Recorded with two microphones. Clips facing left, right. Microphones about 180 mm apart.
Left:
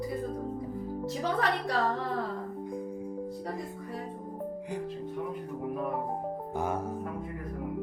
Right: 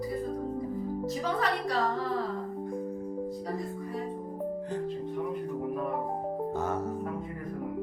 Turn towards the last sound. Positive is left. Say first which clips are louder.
# right 1 dB
turn(degrees=10)  # may be behind; listen again after turning